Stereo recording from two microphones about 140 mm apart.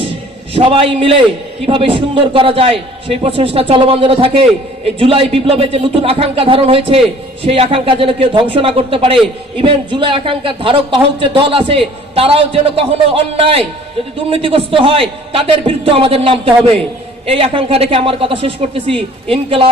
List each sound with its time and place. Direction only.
0.5 s a man's voice: 40° right (ahead or behind)